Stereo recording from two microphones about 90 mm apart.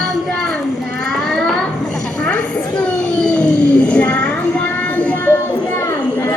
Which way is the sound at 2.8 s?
10° left (ahead or behind).